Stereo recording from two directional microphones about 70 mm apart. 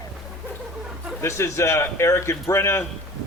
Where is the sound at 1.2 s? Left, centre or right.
Left.